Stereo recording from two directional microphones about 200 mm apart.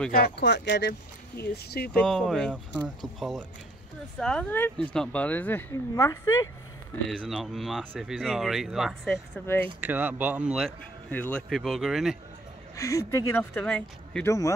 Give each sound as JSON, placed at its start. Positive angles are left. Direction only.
{"t": 0.1, "sound": "speech", "side_deg": 55}
{"t": 2.0, "sound": "speech", "side_deg": 5}
{"t": 7.1, "sound": "speech", "side_deg": 0}
{"t": 9.8, "sound": "speech", "side_deg": -10}
{"t": 11.1, "sound": "speech", "side_deg": 10}
{"t": 12.7, "sound": "speech", "side_deg": 15}